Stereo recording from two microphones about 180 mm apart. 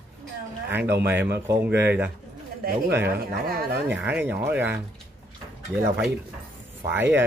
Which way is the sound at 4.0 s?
10° right (ahead or behind).